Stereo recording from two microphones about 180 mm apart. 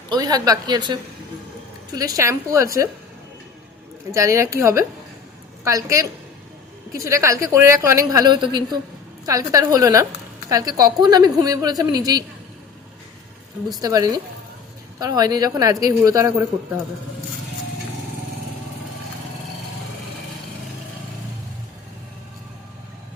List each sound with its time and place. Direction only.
0.1 s a woman's voice: 20° right (ahead or behind)
2.0 s a woman's voice: 20° right (ahead or behind)
4.1 s a woman's voice: 15° right (ahead or behind)
13.7 s a woman's voice: 20° right (ahead or behind)